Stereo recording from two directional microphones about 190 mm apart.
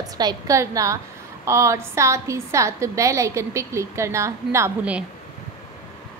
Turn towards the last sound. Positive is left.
turn(degrees=-10)  # may be behind; listen again after turning